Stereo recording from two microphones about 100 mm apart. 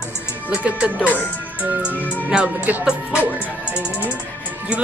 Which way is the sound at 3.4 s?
10° right (ahead or behind).